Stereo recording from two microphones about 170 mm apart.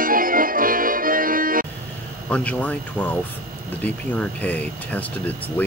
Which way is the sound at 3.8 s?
10° left (ahead or behind).